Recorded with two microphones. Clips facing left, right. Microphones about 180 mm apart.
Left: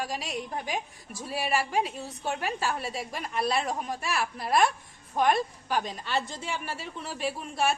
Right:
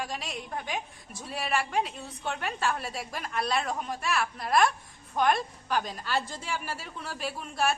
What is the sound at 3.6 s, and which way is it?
Speech, 30° left (ahead or behind).